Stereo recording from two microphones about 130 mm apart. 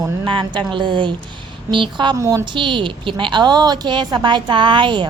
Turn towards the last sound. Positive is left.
turn(degrees=-35)  # may be behind; listen again after turning